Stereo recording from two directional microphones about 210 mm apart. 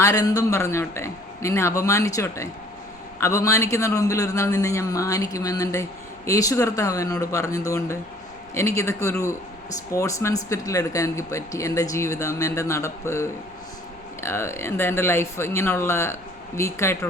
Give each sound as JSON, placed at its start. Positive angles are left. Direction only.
{"t": 0.0, "sound": "speech", "side_deg": 15}